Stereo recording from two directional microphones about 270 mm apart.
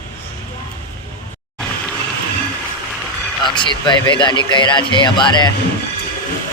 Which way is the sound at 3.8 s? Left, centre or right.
Centre.